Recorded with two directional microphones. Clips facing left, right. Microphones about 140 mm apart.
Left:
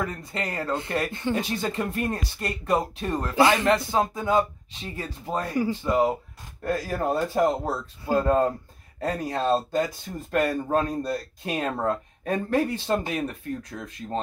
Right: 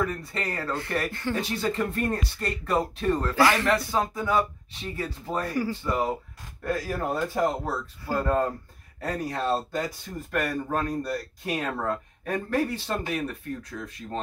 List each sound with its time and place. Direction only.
0.0 s speech: 20° left (ahead or behind)